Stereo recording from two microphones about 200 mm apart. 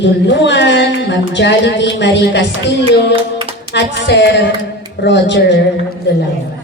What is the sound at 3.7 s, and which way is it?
Speech, 60° left (ahead or behind).